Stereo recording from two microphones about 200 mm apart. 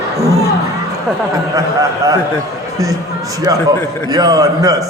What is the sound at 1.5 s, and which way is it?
Speech, 15° right (ahead or behind).